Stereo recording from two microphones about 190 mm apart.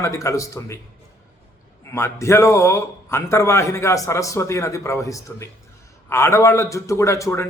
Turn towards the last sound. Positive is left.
turn(degrees=15)  # may be behind; listen again after turning